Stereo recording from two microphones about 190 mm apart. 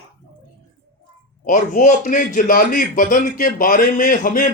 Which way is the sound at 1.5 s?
45° left (ahead or behind).